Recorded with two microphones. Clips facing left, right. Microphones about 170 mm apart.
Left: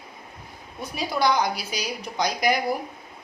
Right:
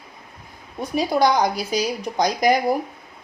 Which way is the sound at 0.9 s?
45° right (ahead or behind).